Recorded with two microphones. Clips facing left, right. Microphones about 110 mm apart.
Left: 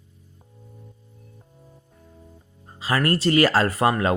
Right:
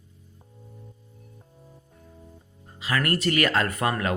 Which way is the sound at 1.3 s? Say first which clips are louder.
Even; centre (ahead or behind).